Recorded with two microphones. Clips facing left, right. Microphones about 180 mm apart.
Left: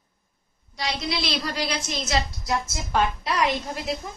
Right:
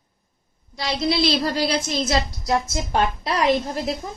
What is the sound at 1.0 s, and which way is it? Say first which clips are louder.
A woman's voice: right 10 dB; 30° right (ahead or behind).